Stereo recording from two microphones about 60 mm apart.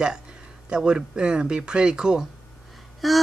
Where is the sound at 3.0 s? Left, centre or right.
Centre.